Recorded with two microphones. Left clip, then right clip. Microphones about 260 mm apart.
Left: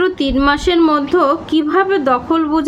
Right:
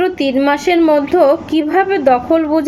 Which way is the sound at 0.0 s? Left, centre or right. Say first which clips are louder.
Even; centre.